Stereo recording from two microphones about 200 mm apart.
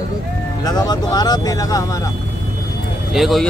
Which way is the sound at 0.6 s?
20° left (ahead or behind).